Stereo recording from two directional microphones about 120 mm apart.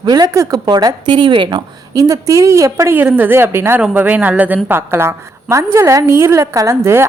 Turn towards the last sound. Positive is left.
turn(degrees=-20)  # may be behind; listen again after turning